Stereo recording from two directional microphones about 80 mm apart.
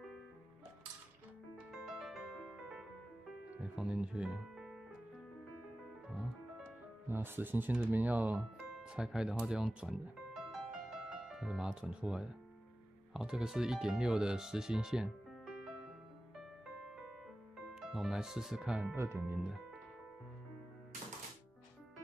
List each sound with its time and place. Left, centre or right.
1.7 s music: centre
3.4 s music: centre
7.1 s speech: right
8.8 s speech: centre
10.5 s music: centre
13.1 s speech: centre
17.7 s speech: centre
19.4 s music: centre